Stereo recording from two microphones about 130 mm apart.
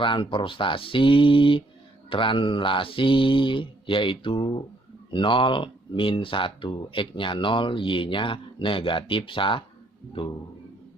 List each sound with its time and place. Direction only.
0.0 s speech: 40° left (ahead or behind)